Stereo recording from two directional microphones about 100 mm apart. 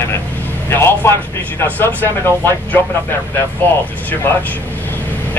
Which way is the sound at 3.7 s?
20° left (ahead or behind).